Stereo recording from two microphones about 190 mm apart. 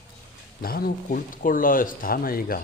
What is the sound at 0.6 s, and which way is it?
Speech, 50° left (ahead or behind).